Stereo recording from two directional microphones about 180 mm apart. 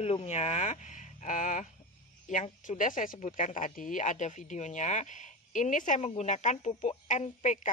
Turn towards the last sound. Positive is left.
turn(degrees=45)  # may be behind; listen again after turning